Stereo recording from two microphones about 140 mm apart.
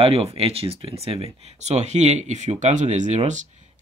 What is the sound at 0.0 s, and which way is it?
Speech, 45° right (ahead or behind).